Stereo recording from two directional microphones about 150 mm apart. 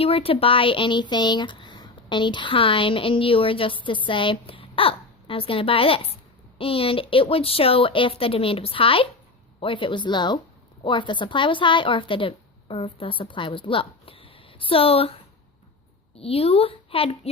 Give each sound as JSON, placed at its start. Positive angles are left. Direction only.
{"t": 0.0, "sound": "speech", "side_deg": 40}